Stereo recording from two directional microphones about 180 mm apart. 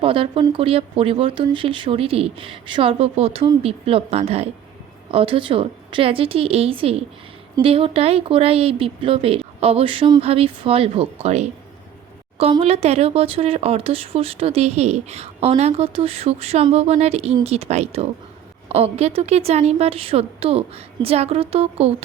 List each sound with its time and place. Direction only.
0.0 s speech: 30° right (ahead or behind)